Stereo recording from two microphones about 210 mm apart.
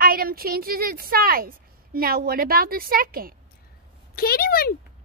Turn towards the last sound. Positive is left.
turn(degrees=45)  # may be behind; listen again after turning